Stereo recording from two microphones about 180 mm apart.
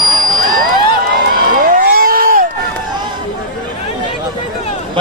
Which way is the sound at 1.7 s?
55° right (ahead or behind).